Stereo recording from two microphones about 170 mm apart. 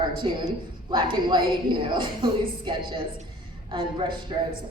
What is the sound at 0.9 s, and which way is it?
A woman's voice, 30° right (ahead or behind).